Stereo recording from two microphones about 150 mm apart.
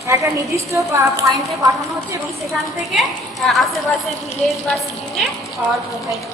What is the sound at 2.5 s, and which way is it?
A woman's voice, centre (ahead or behind).